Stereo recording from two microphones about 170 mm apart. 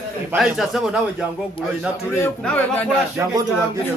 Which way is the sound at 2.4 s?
5° left (ahead or behind).